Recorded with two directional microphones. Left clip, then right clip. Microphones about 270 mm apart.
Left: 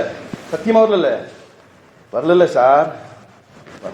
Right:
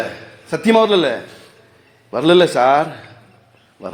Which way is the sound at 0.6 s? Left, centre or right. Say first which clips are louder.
Even; right.